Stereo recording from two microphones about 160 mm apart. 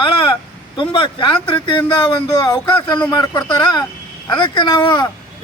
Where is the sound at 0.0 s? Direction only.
30° left (ahead or behind).